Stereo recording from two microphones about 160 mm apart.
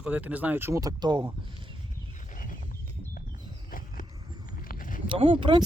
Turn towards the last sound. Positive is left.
turn(degrees=-30)  # may be behind; listen again after turning